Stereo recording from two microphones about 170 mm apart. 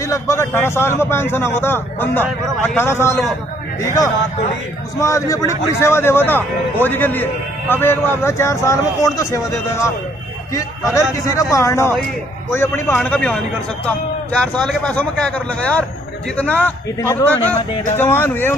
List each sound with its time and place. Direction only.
0.0 s a man's voice: 15° left (ahead or behind)
5.0 s a man's voice: 20° left (ahead or behind)
14.4 s a man's voice: 5° left (ahead or behind)